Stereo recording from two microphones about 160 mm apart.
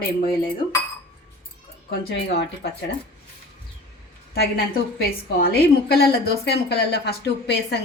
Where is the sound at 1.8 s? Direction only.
90° left.